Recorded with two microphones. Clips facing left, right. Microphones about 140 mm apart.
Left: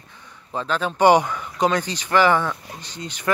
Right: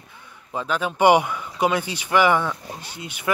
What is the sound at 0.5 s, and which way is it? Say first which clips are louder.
Speech: left 1 dB; 10° right (ahead or behind).